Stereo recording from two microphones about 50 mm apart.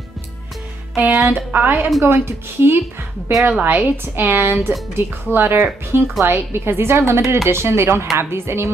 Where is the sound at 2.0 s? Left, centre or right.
Right.